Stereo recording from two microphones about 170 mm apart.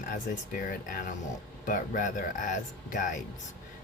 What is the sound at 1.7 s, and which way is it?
Speech, 50° left (ahead or behind).